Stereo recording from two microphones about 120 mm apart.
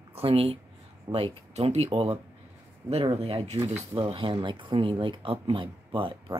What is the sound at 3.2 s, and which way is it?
Speech, 55° right (ahead or behind).